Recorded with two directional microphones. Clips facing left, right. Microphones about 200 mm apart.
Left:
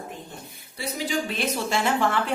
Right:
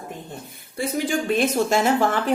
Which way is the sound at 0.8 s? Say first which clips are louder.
Right 4 dB; 50° right (ahead or behind).